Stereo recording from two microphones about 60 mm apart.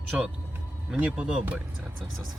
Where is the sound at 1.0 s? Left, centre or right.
Right.